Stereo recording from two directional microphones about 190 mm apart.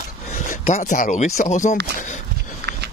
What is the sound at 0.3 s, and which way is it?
Speech, 40° left (ahead or behind).